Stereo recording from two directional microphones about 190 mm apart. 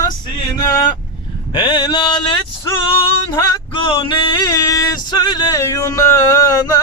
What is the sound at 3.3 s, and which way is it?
Music, 25° left (ahead or behind).